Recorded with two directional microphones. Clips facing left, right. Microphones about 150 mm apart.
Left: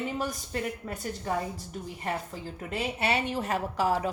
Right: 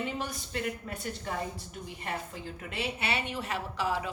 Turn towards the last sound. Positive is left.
turn(degrees=45)  # may be behind; listen again after turning